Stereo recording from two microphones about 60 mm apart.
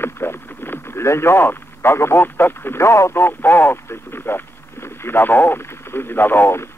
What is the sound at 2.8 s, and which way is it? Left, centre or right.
Speech, left.